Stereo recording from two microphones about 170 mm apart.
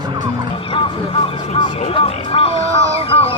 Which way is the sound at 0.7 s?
30° left (ahead or behind).